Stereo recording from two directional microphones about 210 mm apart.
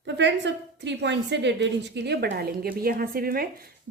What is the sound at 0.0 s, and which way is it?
A woman's voice, 55° right (ahead or behind).